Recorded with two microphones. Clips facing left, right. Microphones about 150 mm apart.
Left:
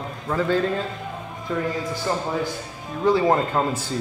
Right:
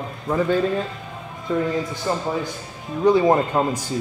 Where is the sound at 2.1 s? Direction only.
15° right (ahead or behind).